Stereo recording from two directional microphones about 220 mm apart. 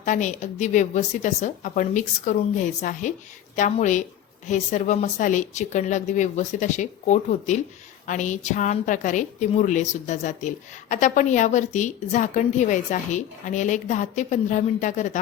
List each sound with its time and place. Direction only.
0.0 s a woman's voice: 35° left (ahead or behind)